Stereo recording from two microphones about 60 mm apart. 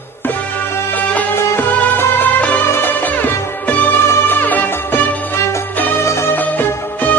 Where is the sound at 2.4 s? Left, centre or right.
Left.